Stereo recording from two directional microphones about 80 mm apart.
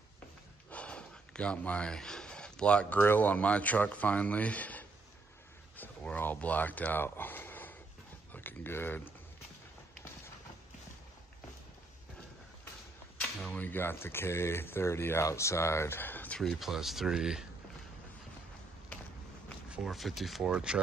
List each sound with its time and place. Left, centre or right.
0.7 s speech: centre
5.8 s a sound: left
8.3 s speech: left
13.5 s speech: left
16.3 s speech: centre
19.9 s speech: centre
20.5 s speech: centre